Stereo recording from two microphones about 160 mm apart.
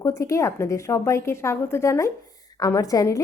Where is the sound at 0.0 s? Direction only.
20° left (ahead or behind).